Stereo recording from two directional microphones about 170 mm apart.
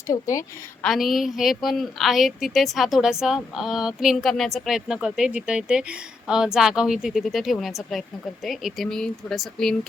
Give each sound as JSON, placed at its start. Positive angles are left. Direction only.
{"t": 0.1, "sound": "a woman's voice", "side_deg": 20}
{"t": 0.8, "sound": "a woman's voice", "side_deg": 0}